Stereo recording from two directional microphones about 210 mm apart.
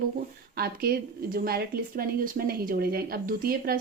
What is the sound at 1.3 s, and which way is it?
Speech, 45° right (ahead or behind).